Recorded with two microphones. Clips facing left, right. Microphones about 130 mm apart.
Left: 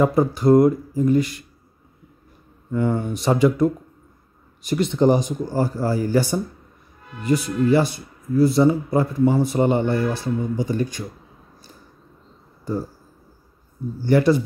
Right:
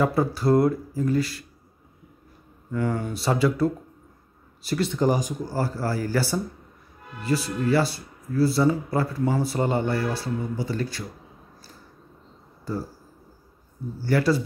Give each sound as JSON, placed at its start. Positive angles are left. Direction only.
{"t": 0.0, "sound": "speech", "side_deg": 20}
{"t": 2.7, "sound": "speech", "side_deg": 20}
{"t": 14.0, "sound": "speech", "side_deg": 20}